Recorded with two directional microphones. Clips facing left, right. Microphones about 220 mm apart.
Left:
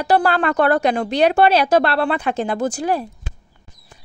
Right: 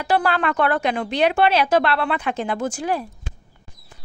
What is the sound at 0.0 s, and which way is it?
Speech, 40° left (ahead or behind).